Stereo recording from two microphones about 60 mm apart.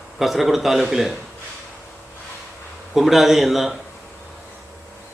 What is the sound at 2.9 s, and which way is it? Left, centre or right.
Speech, centre.